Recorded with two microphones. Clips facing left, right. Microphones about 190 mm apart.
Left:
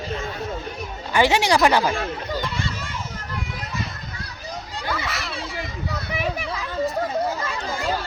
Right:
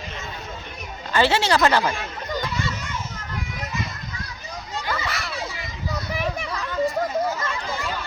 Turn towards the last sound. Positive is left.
turn(degrees=0)  # may be behind; listen again after turning